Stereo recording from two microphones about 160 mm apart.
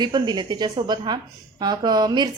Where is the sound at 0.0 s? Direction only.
25° right (ahead or behind).